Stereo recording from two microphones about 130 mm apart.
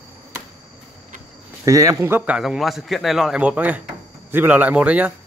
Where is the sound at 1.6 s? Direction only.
25° right (ahead or behind).